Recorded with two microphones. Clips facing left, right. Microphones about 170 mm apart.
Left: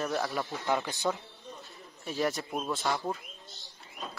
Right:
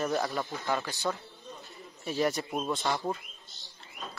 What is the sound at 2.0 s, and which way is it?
Speech, centre (ahead or behind).